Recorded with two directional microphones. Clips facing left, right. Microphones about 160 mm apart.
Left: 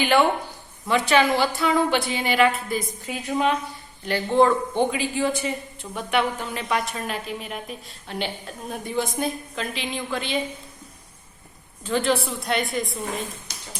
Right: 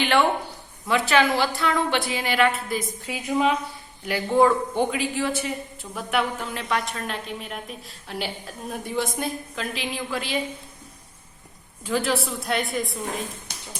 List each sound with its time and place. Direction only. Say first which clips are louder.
0.0 s a man's voice: left 1 dB; 5° left (ahead or behind)
11.9 s a man's voice: left 2 dB; 5° right (ahead or behind)
13.5 s a sound: right 1 dB; 60° right (ahead or behind)